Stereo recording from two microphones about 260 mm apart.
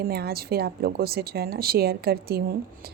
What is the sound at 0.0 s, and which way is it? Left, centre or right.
Speech, right.